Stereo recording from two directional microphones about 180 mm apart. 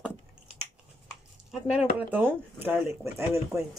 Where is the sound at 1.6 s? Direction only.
5° right (ahead or behind).